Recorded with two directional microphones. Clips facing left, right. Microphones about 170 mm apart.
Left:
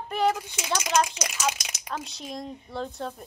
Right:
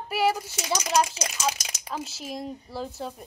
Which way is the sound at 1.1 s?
35° right (ahead or behind).